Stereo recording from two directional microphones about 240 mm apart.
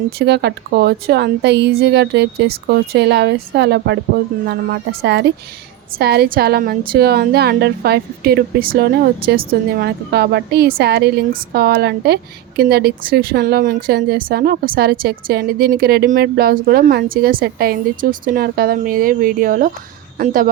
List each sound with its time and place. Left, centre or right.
0.2 s a woman's voice: right